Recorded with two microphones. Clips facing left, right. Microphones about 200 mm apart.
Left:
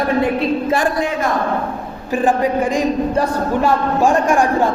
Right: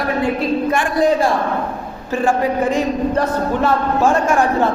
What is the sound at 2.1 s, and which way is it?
Speech, 15° left (ahead or behind).